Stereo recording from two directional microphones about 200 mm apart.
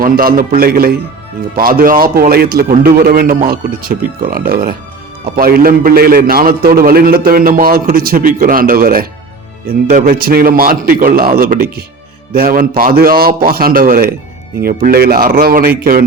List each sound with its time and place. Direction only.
0.0 s a man's voice: 45° right (ahead or behind)